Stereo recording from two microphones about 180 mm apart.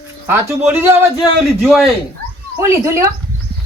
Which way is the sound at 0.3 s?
10° right (ahead or behind).